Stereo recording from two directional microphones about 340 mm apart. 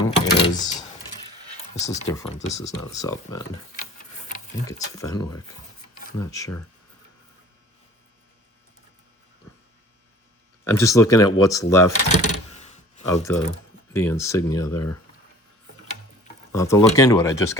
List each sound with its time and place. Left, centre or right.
0.0 s a sound: centre
1.5 s speech: centre
4.6 s speech: centre
10.6 s speech: centre
12.1 s a sound: centre
14.0 s speech: centre
16.5 s speech: centre